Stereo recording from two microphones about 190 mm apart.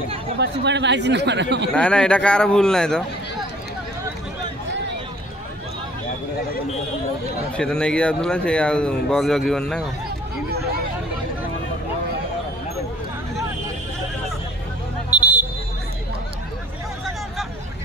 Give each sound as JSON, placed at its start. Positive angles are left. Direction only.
{"t": 0.4, "sound": "speech", "side_deg": -65}
{"t": 1.7, "sound": "speech", "side_deg": 5}
{"t": 7.5, "sound": "speech", "side_deg": 5}
{"t": 15.0, "sound": "a sound", "side_deg": -10}